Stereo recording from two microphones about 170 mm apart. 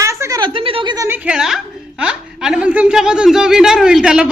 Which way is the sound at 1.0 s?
10° right (ahead or behind).